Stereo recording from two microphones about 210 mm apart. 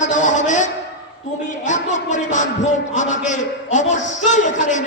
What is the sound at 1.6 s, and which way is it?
A man's voice, 35° left (ahead or behind).